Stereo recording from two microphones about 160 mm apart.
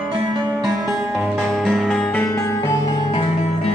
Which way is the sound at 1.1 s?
Centre (ahead or behind).